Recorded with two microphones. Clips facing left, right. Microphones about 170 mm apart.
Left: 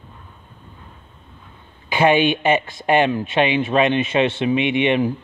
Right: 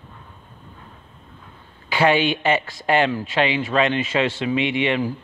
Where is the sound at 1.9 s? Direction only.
20° left (ahead or behind).